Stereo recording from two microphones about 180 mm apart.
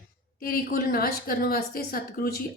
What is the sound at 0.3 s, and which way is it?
A woman's voice, 55° left (ahead or behind).